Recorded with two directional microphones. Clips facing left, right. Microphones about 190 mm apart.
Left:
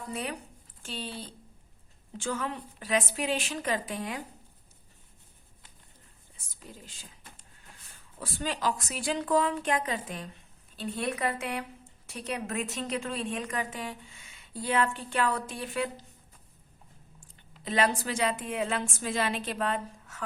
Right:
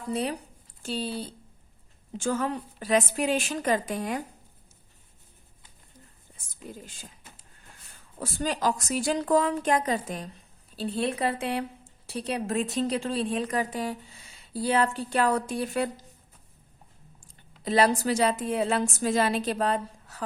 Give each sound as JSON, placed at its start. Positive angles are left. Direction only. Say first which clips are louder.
{"t": 0.1, "sound": "a woman's voice", "louder": "right 8 dB", "side_deg": -35}
{"t": 6.3, "sound": "speech", "louder": "right 7 dB", "side_deg": -50}
{"t": 8.2, "sound": "a woman's voice", "louder": "right 4 dB", "side_deg": -40}
{"t": 17.6, "sound": "a woman's voice", "louder": "right 5 dB", "side_deg": -35}